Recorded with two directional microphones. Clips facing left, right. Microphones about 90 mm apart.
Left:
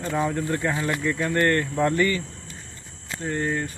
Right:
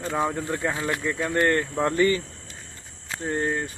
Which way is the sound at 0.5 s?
15° right (ahead or behind).